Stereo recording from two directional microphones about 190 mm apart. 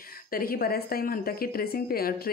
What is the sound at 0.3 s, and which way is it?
A woman's voice, 50° left (ahead or behind).